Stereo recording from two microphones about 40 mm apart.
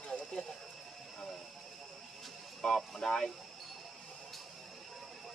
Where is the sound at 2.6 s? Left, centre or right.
Centre.